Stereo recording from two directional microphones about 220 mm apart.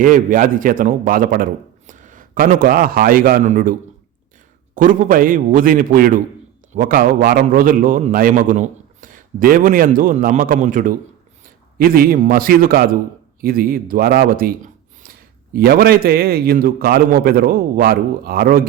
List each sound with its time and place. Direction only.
0.0 s a man's voice: 40° right (ahead or behind)